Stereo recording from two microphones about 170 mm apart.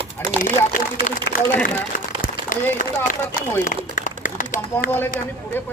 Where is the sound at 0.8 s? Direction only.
55° left (ahead or behind).